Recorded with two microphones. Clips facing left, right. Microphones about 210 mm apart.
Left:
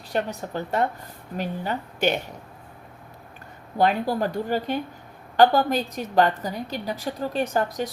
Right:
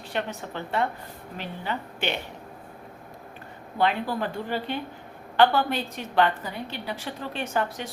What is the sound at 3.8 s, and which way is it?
A woman's voice, 40° left (ahead or behind).